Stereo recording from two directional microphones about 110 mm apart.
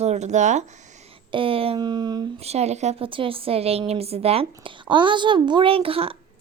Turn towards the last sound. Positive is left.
turn(degrees=-60)  # may be behind; listen again after turning